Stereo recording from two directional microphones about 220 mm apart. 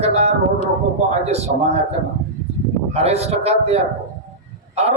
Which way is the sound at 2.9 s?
30° right (ahead or behind).